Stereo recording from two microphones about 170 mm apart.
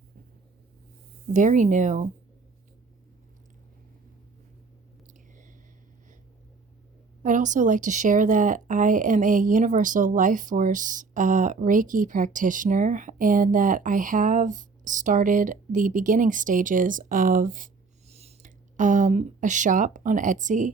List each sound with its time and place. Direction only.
1.3 s speech: 50° right (ahead or behind)
7.2 s speech: 50° right (ahead or behind)
18.1 s speech: 40° right (ahead or behind)